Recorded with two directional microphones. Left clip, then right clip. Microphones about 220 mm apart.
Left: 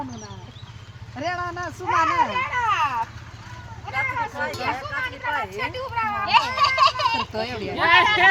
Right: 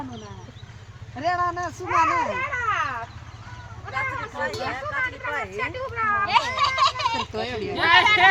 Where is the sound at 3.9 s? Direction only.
10° left (ahead or behind).